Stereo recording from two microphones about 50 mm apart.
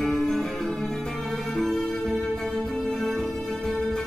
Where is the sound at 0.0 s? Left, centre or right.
Centre.